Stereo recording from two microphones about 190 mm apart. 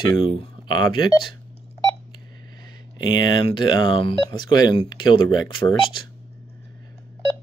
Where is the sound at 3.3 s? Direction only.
25° left (ahead or behind).